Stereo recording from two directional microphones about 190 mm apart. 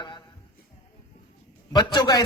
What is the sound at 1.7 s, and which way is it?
Speech, 20° left (ahead or behind).